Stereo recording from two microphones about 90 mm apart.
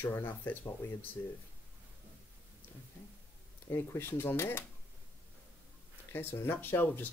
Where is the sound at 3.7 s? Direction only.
30° left (ahead or behind).